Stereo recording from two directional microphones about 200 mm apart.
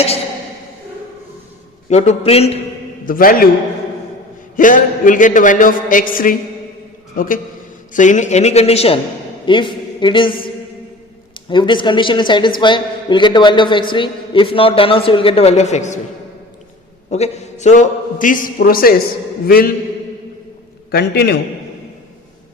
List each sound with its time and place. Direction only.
1.9 s a man's voice: 35° left (ahead or behind)
3.1 s a man's voice: 45° left (ahead or behind)
4.5 s a man's voice: 40° left (ahead or behind)
17.1 s a man's voice: 35° left (ahead or behind)
20.9 s a man's voice: 55° left (ahead or behind)